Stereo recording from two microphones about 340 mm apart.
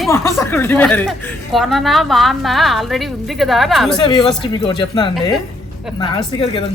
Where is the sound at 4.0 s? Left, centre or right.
Centre.